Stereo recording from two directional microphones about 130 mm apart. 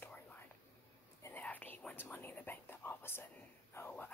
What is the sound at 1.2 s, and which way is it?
Speech, 15° left (ahead or behind).